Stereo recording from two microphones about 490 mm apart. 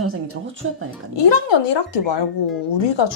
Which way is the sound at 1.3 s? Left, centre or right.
Left.